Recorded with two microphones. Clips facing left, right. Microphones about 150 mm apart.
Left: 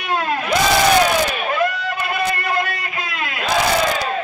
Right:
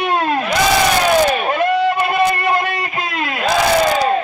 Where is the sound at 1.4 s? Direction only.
35° right (ahead or behind).